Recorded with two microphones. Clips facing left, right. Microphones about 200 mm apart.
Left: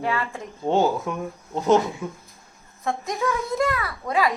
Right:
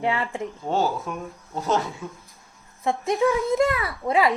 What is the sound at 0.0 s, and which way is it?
Speech, 20° right (ahead or behind).